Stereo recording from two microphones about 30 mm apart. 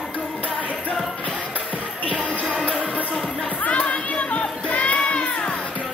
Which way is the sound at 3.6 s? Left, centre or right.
Left.